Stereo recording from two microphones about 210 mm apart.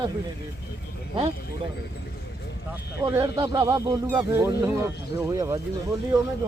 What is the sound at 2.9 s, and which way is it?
Speech, 10° right (ahead or behind).